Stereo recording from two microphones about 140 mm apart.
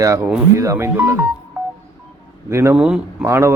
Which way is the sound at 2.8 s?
5° right (ahead or behind).